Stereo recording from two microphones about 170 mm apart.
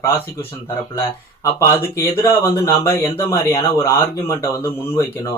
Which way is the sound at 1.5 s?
15° left (ahead or behind).